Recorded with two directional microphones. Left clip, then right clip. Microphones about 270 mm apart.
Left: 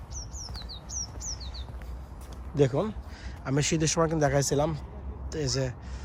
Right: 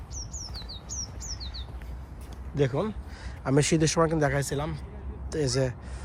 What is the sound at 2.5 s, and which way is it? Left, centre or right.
Speech, centre.